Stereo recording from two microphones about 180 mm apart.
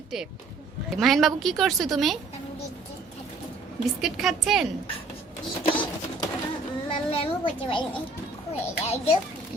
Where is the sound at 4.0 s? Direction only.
Centre (ahead or behind).